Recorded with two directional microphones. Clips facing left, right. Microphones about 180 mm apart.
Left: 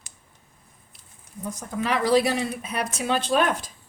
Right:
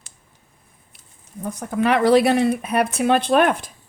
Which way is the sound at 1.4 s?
60° right (ahead or behind).